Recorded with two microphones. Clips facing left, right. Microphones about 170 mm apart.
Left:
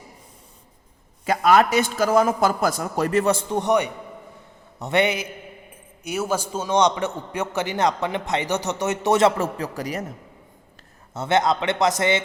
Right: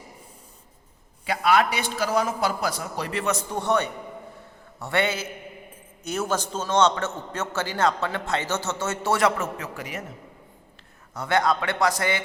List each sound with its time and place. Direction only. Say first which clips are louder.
1.2 s a man's voice: left 4 dB; 45° left (ahead or behind)
3.3 s a man's voice: left 4 dB; 20° left (ahead or behind); by 10.1 s 40° left (ahead or behind)
11.1 s speech: left 3 dB; 25° left (ahead or behind)